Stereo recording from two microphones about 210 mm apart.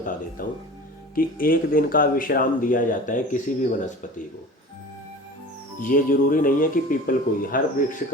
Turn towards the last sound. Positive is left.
turn(degrees=40)  # may be behind; listen again after turning